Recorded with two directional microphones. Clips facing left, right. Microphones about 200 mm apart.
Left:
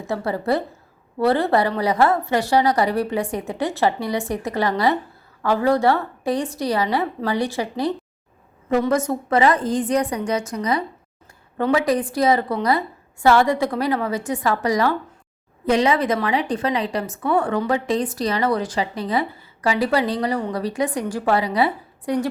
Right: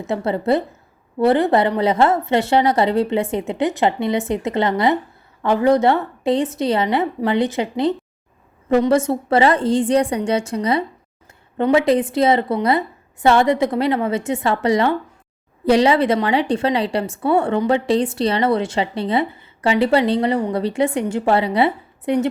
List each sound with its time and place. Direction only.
0.1 s a woman's voice: 25° right (ahead or behind)